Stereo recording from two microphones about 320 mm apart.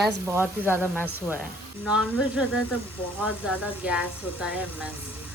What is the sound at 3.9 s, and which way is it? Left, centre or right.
Speech, centre.